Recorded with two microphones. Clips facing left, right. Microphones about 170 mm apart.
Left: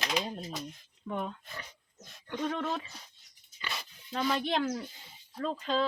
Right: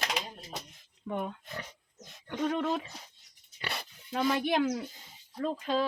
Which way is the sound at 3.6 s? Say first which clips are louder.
Right 2 dB; 65° right (ahead or behind).